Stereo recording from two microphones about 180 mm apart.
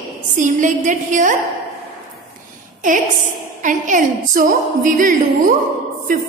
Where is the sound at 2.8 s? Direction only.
45° right (ahead or behind).